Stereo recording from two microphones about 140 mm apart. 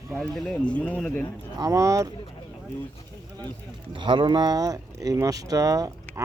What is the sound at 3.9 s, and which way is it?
Speech, 35° right (ahead or behind).